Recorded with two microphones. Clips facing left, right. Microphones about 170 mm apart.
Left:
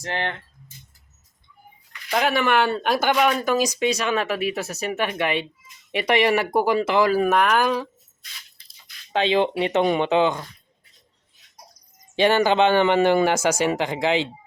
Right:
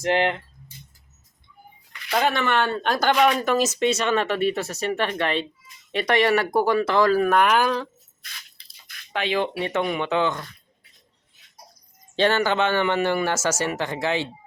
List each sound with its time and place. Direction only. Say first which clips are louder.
0.0 s speech: right 7 dB; 20° right (ahead or behind)
2.0 s a man's voice: left 1 dB; 5° left (ahead or behind)
9.1 s speech: left 4 dB; 25° left (ahead or behind)
12.1 s a man's voice: left 3 dB; 15° left (ahead or behind)